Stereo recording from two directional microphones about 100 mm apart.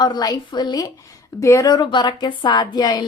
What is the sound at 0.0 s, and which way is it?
Speech, 40° left (ahead or behind).